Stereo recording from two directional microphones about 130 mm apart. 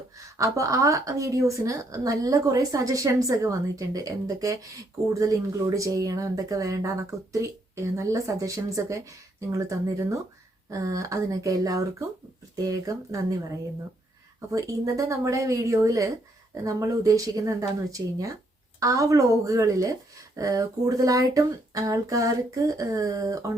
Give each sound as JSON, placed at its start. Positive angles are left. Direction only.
{"t": 0.3, "sound": "a woman's voice", "side_deg": -25}
{"t": 14.5, "sound": "a woman's voice", "side_deg": -25}